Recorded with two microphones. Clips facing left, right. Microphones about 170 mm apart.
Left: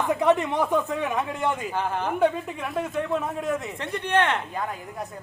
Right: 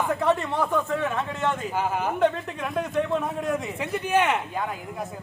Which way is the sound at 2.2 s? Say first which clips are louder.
Left 1 dB; 10° left (ahead or behind).